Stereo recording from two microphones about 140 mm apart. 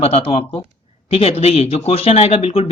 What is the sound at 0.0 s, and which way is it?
Speech, 45° left (ahead or behind).